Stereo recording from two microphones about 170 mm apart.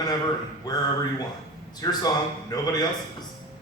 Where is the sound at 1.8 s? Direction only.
20° left (ahead or behind).